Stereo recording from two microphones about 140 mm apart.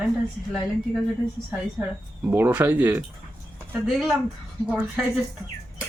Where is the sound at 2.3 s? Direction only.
15° right (ahead or behind).